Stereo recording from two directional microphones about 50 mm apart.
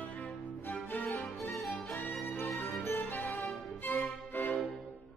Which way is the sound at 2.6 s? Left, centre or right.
Left.